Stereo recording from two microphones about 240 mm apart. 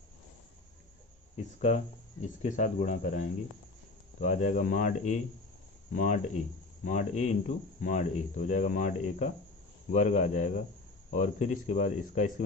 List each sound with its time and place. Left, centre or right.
1.5 s speech: left